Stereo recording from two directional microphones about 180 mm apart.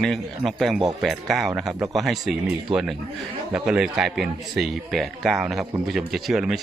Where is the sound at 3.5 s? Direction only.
5° right (ahead or behind).